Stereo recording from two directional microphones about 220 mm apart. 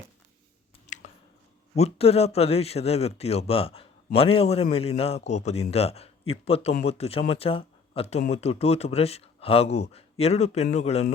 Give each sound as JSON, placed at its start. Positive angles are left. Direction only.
{"t": 1.7, "sound": "a man's voice", "side_deg": 30}